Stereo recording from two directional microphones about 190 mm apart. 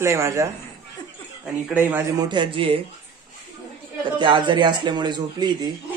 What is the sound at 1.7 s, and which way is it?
Speech, 10° right (ahead or behind).